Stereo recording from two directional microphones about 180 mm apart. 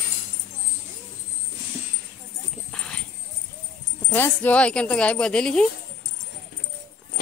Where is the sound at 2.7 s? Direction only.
5° left (ahead or behind).